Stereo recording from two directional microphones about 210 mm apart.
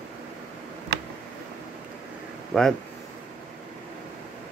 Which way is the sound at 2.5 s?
Centre (ahead or behind).